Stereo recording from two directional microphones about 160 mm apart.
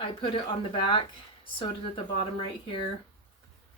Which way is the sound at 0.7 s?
30° left (ahead or behind).